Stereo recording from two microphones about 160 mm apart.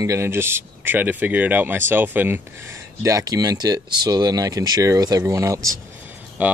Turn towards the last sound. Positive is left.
turn(degrees=-10)  # may be behind; listen again after turning